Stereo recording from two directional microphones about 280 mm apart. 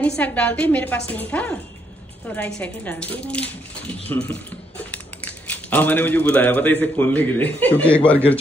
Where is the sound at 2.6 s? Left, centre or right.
Centre.